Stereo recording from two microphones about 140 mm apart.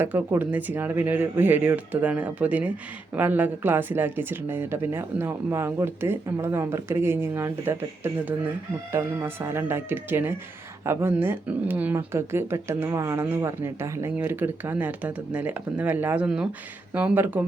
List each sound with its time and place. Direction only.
0.0 s speech: 15° right (ahead or behind)